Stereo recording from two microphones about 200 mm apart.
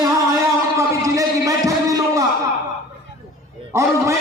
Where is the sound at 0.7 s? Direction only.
15° right (ahead or behind).